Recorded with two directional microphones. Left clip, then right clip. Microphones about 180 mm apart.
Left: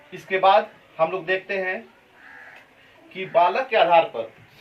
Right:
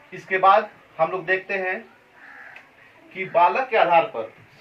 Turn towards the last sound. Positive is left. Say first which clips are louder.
# left 1 dB
turn(degrees=-20)  # may be behind; listen again after turning